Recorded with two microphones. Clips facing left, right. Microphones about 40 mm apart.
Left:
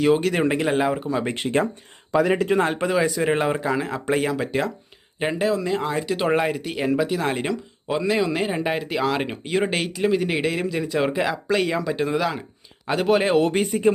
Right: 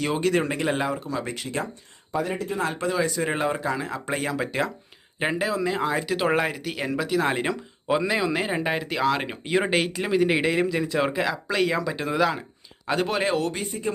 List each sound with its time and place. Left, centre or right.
0.0 s speech: centre
0.9 s speech: left
1.3 s speech: left
2.1 s speech: left
2.6 s speech: left
2.8 s speech: centre
13.5 s speech: left